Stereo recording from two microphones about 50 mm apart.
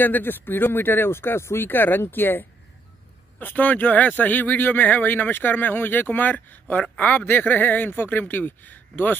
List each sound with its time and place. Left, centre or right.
0.0 s speech: left
1.6 s speech: left
3.4 s speech: left